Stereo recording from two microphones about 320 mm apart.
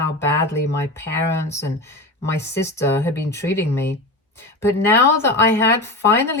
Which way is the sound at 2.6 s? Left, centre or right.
Centre.